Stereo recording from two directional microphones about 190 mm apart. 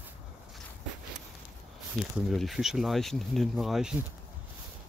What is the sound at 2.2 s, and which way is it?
Speech, centre (ahead or behind).